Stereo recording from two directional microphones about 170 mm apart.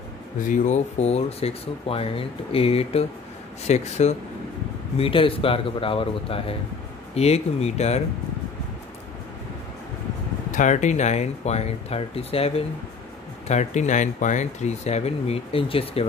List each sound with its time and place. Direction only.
0.5 s speech: 45° left (ahead or behind)
10.5 s speech: 45° left (ahead or behind)